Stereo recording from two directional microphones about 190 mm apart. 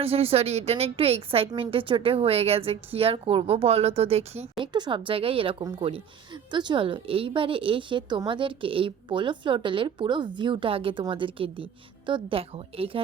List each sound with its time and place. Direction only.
0.0 s a woman's voice: 30° right (ahead or behind)